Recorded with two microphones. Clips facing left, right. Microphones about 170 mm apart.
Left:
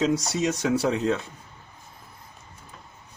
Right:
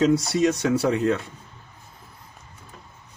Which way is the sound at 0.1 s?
30° right (ahead or behind).